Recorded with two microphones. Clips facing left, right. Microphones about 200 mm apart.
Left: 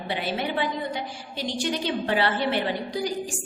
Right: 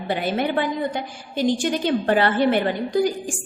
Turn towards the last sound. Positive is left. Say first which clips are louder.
# right 7 dB
turn(degrees=-50)  # may be behind; listen again after turning